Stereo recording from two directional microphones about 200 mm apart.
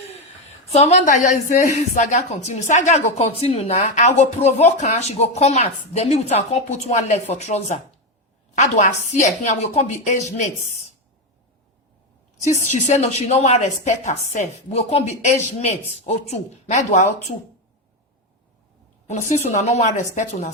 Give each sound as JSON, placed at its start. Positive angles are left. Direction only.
{"t": 0.7, "sound": "speech", "side_deg": 35}
{"t": 12.4, "sound": "speech", "side_deg": 35}
{"t": 19.0, "sound": "speech", "side_deg": 35}